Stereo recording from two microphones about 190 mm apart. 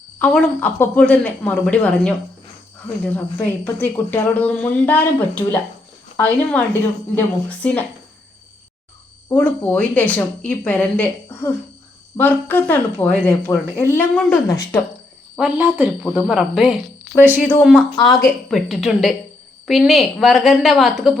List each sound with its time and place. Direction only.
0.2 s speech: 10° left (ahead or behind)
3.2 s speech: 10° left (ahead or behind)
9.3 s speech: 10° left (ahead or behind)
15.4 s a woman's voice: 10° right (ahead or behind)
17.9 s speech: 20° left (ahead or behind)
18.5 s a woman's voice: centre (ahead or behind)